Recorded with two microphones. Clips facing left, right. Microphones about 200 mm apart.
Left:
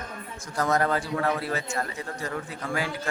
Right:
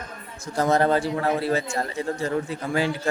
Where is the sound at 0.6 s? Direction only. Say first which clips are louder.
Right 5 dB; 30° right (ahead or behind).